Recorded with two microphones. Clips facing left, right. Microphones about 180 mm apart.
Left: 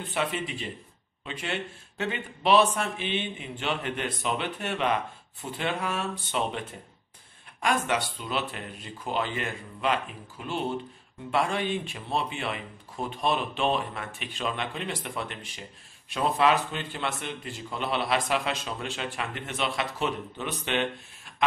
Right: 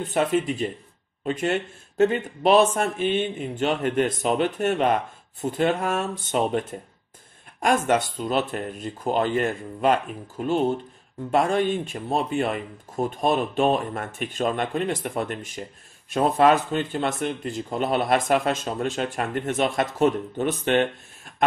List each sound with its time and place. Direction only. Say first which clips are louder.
0.1 s speech: right 8 dB; 45° right (ahead or behind)